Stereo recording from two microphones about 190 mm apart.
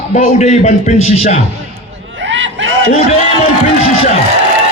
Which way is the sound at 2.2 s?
70° right (ahead or behind).